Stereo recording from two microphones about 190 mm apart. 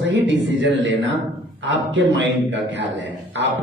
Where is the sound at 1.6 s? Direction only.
70° right (ahead or behind).